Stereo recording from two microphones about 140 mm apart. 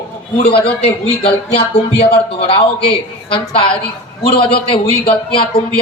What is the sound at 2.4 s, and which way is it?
A man's voice, 45° left (ahead or behind).